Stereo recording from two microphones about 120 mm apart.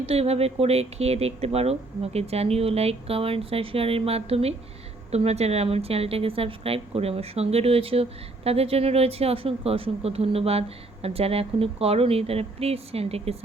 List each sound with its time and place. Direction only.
0.0 s speech: 55° right (ahead or behind)